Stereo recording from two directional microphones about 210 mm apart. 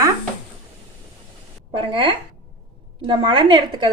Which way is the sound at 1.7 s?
25° right (ahead or behind).